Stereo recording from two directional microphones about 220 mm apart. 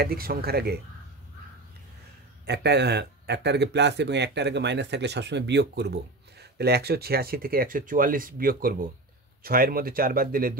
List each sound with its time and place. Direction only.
0.0 s speech: 45° right (ahead or behind)
2.4 s speech: 50° right (ahead or behind)